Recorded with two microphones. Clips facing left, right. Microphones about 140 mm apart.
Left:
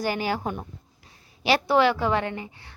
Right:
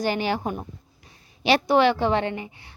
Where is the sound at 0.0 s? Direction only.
25° right (ahead or behind).